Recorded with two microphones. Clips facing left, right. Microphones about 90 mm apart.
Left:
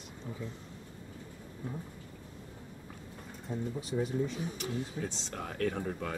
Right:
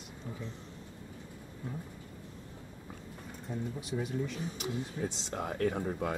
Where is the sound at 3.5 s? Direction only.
5° left (ahead or behind).